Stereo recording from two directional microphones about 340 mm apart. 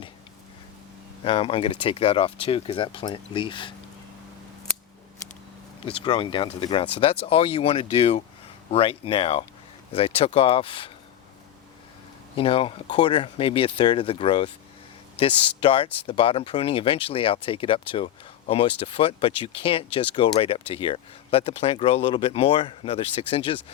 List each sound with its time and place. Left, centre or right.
1.2 s speech: centre
5.8 s speech: centre
12.4 s speech: centre